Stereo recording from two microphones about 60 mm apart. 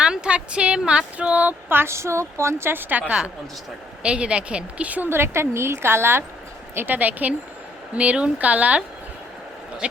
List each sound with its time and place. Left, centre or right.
0.0 s speech: centre
1.7 s a woman's voice: right
4.0 s a woman's voice: centre
5.0 s a woman's voice: right
6.7 s a woman's voice: right
9.8 s a woman's voice: centre